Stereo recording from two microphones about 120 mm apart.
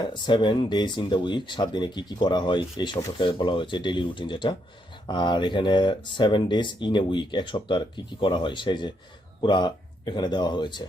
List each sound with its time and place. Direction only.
0.0 s speech: 40° left (ahead or behind)